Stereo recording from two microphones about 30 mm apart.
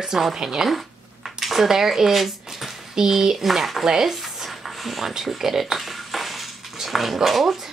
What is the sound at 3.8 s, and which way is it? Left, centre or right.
Stir, centre.